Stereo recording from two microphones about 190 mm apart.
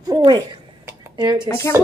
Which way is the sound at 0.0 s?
20° right (ahead or behind).